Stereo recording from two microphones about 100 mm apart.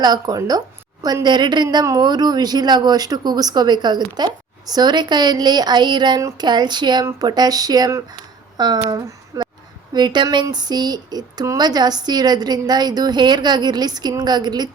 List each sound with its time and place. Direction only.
0.0 s a woman's voice: 40° right (ahead or behind)
9.0 s a sound: 35° right (ahead or behind)
9.9 s a woman's voice: 45° right (ahead or behind)